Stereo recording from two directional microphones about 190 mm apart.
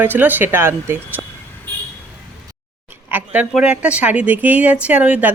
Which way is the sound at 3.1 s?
10° right (ahead or behind).